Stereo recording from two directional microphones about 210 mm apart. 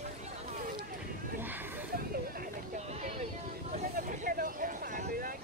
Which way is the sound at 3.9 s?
40° right (ahead or behind).